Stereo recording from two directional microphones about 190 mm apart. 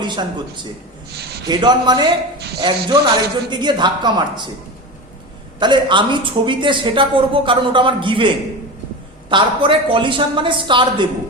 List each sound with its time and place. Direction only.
0.0 s a woman's voice: 25° right (ahead or behind)
5.5 s a woman's voice: 25° right (ahead or behind)
9.3 s a woman's voice: 25° right (ahead or behind)